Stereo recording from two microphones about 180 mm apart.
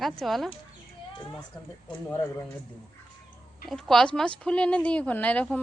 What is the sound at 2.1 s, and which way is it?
Speech, 15° left (ahead or behind).